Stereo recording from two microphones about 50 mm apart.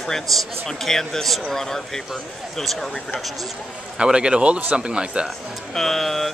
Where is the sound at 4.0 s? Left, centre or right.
Centre.